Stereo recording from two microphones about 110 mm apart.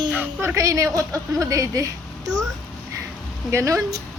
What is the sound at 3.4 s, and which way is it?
Speech, 25° right (ahead or behind).